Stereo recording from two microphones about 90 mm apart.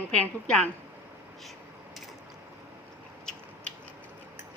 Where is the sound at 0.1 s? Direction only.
10° left (ahead or behind).